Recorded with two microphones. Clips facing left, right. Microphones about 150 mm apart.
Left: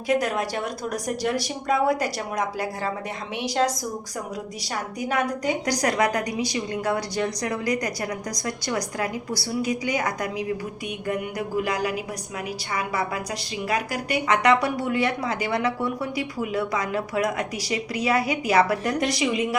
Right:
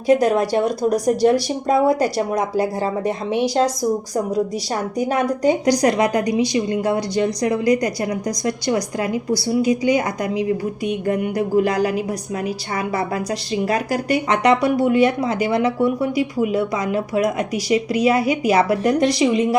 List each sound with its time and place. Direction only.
0.1 s a woman's voice: 35° right (ahead or behind)
4.9 s a woman's voice: 35° right (ahead or behind)
13.6 s speech: 35° right (ahead or behind)